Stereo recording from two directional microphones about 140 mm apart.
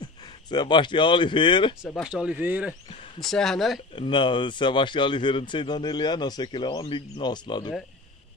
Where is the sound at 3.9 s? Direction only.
35° left (ahead or behind).